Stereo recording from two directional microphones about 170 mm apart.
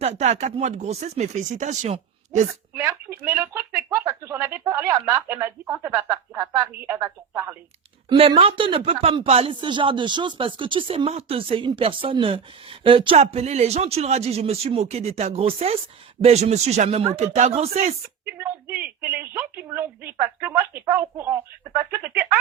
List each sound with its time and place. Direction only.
0.0 s speech: 40° right (ahead or behind)
2.7 s speech: 15° right (ahead or behind)
8.1 s speech: 35° right (ahead or behind)
18.3 s speech: 10° right (ahead or behind)